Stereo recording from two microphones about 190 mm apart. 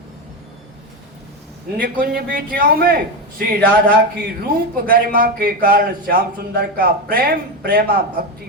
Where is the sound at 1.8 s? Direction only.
50° right (ahead or behind).